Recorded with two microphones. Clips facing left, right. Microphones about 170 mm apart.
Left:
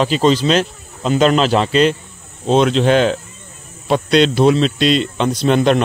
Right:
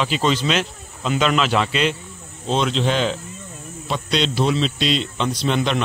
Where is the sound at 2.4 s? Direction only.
55° left (ahead or behind).